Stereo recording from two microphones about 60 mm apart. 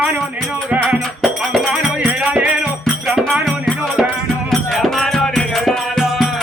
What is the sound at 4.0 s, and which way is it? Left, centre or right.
Music, centre.